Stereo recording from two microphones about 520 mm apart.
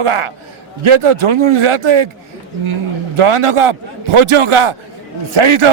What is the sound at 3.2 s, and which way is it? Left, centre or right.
A man's voice, right.